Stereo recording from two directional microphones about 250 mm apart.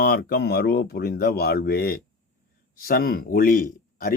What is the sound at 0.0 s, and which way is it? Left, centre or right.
Speech, left.